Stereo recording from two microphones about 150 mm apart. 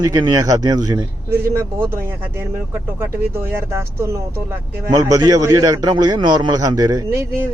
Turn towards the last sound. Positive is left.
turn(degrees=-15)  # may be behind; listen again after turning